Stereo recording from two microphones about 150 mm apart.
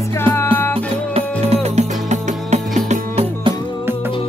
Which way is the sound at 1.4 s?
45° right (ahead or behind).